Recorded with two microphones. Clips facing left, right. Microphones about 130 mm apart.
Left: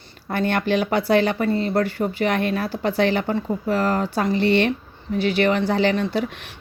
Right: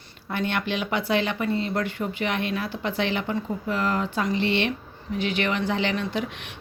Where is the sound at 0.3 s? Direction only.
45° left (ahead or behind).